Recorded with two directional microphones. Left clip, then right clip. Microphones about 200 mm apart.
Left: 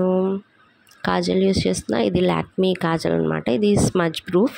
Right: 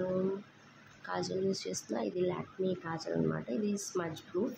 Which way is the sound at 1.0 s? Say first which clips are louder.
Left 15 dB; 45° left (ahead or behind).